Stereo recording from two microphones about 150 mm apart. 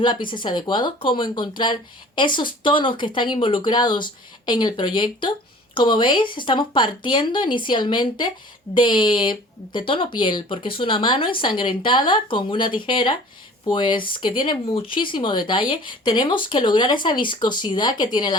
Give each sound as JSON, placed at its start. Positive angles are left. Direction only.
{"t": 0.0, "sound": "speech", "side_deg": 30}